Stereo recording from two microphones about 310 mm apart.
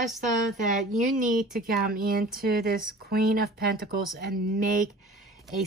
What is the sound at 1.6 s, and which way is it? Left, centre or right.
Speech, right.